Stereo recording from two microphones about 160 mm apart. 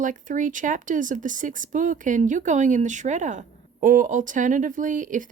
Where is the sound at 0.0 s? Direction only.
55° right (ahead or behind).